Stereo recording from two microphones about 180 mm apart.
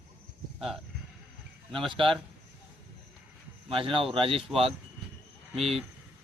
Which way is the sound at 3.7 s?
30° right (ahead or behind).